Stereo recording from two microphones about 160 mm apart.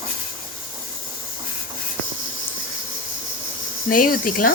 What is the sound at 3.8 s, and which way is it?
Speech, 60° left (ahead or behind).